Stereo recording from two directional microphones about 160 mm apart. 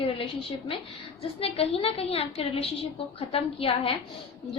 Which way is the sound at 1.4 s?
35° left (ahead or behind).